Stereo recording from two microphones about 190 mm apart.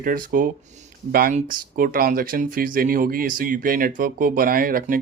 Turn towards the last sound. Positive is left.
turn(degrees=-50)  # may be behind; listen again after turning